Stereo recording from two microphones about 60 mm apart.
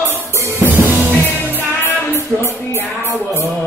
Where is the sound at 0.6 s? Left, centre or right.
Right.